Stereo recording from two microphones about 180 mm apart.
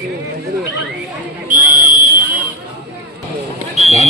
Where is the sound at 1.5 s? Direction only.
50° right (ahead or behind).